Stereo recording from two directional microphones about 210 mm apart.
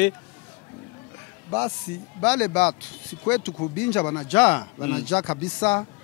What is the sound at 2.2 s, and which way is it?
Speech, 10° left (ahead or behind).